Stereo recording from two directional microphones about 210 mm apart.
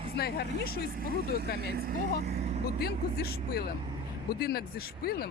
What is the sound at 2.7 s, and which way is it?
Speech, 50° left (ahead or behind).